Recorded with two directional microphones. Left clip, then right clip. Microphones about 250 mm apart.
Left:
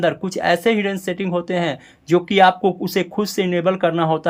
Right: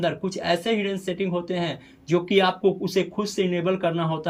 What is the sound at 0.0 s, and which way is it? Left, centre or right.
Speech, centre.